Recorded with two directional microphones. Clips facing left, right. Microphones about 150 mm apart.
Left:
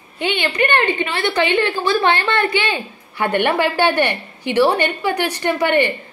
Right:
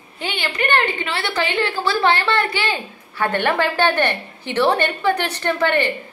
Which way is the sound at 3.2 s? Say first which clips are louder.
Left 2 dB; 15° left (ahead or behind).